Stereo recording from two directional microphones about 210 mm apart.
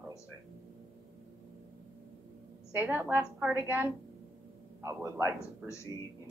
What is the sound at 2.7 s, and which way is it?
A woman's voice, 10° right (ahead or behind).